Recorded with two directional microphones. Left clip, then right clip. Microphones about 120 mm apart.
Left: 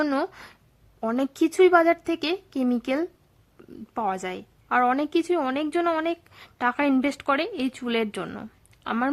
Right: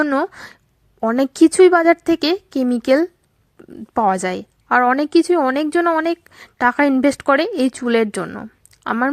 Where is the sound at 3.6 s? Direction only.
25° right (ahead or behind).